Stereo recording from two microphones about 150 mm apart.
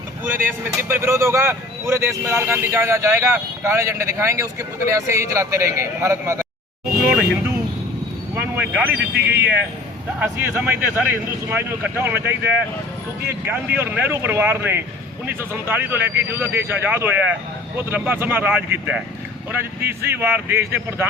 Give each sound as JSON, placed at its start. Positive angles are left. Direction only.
{"t": 0.4, "sound": "a man's voice", "side_deg": -15}
{"t": 8.4, "sound": "speech", "side_deg": -10}
{"t": 10.5, "sound": "speech", "side_deg": -10}